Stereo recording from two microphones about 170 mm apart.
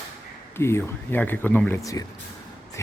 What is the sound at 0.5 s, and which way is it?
Speech, 15° left (ahead or behind).